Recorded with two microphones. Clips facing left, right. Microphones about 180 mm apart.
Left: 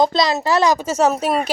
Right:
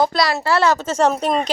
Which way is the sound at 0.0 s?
20° left (ahead or behind).